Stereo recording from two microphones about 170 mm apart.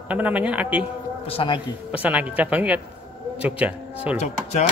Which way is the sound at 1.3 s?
30° left (ahead or behind).